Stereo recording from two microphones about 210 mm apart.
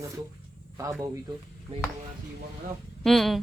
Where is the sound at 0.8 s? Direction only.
15° right (ahead or behind).